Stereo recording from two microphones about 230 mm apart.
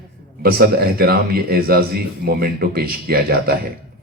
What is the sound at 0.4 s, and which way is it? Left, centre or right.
A man's voice, right.